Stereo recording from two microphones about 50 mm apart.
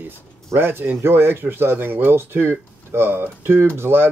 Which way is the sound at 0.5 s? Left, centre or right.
Right.